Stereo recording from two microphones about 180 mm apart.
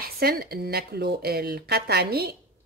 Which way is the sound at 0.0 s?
55° right (ahead or behind).